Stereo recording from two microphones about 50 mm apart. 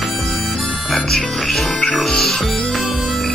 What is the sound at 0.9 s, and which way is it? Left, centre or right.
Speech, centre.